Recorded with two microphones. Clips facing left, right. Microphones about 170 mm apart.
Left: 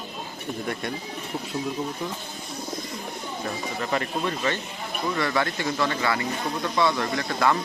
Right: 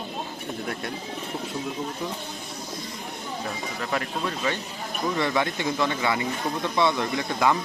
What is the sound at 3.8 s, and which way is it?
Speech, centre (ahead or behind).